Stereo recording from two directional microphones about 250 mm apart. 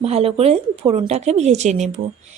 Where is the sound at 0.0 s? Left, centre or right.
Right.